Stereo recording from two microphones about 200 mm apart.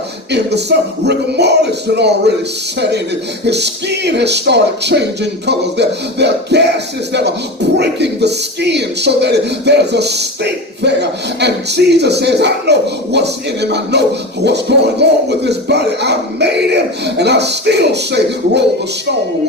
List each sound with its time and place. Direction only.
0.3 s speech: 60° right (ahead or behind)
3.4 s speech: 55° right (ahead or behind)